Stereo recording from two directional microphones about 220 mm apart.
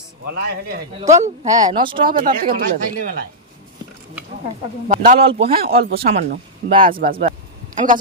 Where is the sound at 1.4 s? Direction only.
20° right (ahead or behind).